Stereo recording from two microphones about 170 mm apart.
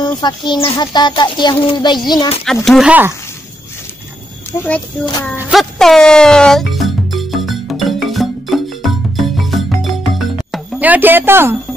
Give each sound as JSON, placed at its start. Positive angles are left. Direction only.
{"t": 0.0, "sound": "speech", "side_deg": 25}
{"t": 2.4, "sound": "speech", "side_deg": 0}
{"t": 4.5, "sound": "speech", "side_deg": 15}
{"t": 5.5, "sound": "speech", "side_deg": 0}
{"t": 6.7, "sound": "music", "side_deg": 0}